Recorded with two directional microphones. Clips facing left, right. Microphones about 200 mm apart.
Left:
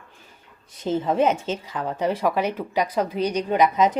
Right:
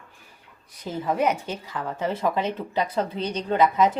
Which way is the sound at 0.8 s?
25° left (ahead or behind).